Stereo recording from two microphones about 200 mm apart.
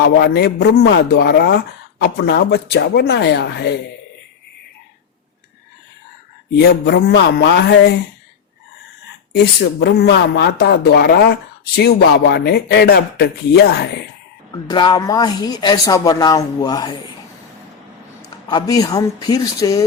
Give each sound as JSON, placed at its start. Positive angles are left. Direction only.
{"t": 0.0, "sound": "speech", "side_deg": 50}
{"t": 6.6, "sound": "speech", "side_deg": 55}
{"t": 9.3, "sound": "speech", "side_deg": 55}
{"t": 14.5, "sound": "speech", "side_deg": 20}
{"t": 18.2, "sound": "speech", "side_deg": 20}